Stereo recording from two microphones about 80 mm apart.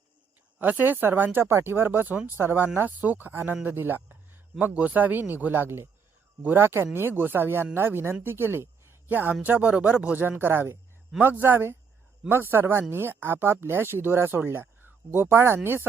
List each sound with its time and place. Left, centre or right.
0.6 s speech: right